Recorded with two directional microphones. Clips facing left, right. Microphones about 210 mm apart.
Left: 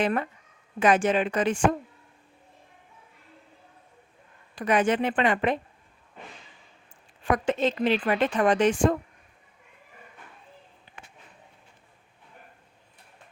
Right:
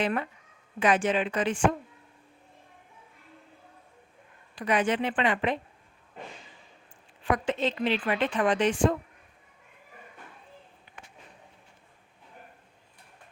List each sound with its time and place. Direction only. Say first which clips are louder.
0.0 s a woman's voice: left 3 dB; 45° left (ahead or behind)
4.5 s a woman's voice: left 3 dB; 45° left (ahead or behind)
7.3 s a woman's voice: left 3 dB; 45° left (ahead or behind)
10.9 s a sound: left 1 dB; 30° left (ahead or behind)